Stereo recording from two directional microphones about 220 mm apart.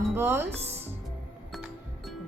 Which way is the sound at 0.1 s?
10° right (ahead or behind).